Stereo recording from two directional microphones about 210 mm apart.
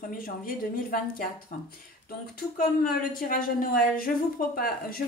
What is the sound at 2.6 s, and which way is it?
Speech, 45° left (ahead or behind).